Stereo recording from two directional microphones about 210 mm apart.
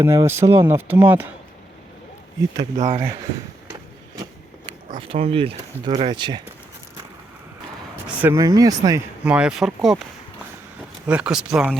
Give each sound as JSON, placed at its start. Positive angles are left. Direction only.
{"t": 0.0, "sound": "speech", "side_deg": -15}
{"t": 2.7, "sound": "speech", "side_deg": -30}
{"t": 4.9, "sound": "speech", "side_deg": -25}
{"t": 8.0, "sound": "speech", "side_deg": -10}
{"t": 9.2, "sound": "speech", "side_deg": -5}